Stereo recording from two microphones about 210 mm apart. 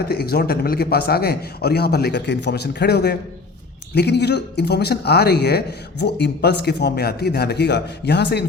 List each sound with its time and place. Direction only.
0.1 s speech: 50° left (ahead or behind)